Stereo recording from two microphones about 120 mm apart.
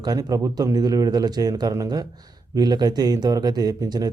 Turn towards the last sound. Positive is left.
turn(degrees=-35)  # may be behind; listen again after turning